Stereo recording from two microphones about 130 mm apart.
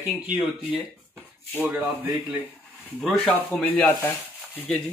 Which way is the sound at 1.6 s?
10° right (ahead or behind).